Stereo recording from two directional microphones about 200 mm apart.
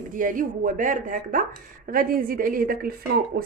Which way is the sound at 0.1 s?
40° right (ahead or behind).